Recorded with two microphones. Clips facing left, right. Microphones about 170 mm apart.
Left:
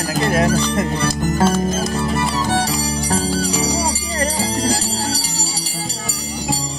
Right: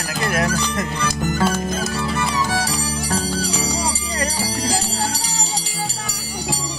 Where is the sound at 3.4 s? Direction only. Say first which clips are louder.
Left 4 dB; 50° left (ahead or behind).